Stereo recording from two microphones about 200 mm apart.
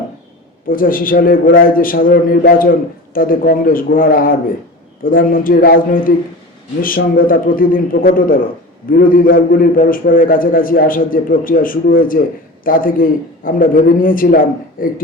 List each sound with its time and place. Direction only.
0.7 s a man's voice: 45° left (ahead or behind)